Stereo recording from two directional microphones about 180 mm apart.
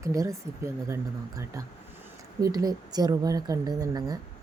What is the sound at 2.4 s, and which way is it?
Speech, 20° right (ahead or behind).